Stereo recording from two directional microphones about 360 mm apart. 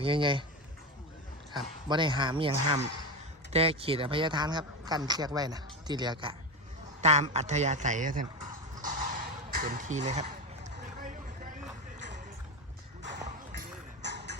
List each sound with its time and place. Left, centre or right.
0.0 s speech: centre
1.9 s speech: centre
8.8 s a sound: right
11.9 s music: right